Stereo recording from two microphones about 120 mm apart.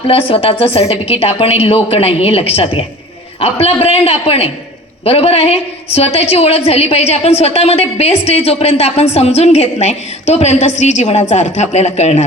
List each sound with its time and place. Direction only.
0.1 s a woman's voice: 50° left (ahead or behind)